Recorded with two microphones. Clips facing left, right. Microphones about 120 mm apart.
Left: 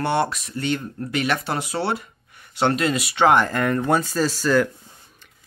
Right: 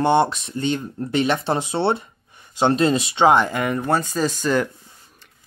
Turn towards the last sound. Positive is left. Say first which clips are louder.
# left 1 dB
turn(degrees=0)  # may be behind; listen again after turning